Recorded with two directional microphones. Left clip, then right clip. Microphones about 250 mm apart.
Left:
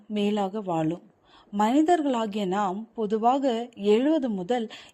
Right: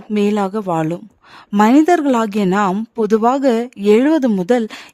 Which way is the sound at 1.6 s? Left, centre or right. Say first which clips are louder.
Right 10 dB; right.